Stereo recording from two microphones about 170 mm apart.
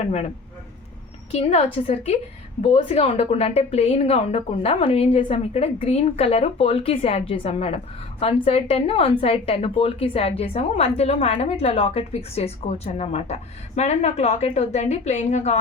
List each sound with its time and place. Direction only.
0.0 s a woman's voice: 35° left (ahead or behind)
1.3 s a woman's voice: 40° left (ahead or behind)